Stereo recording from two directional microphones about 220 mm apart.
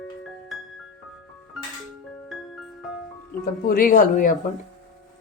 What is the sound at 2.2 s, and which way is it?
Music, centre (ahead or behind).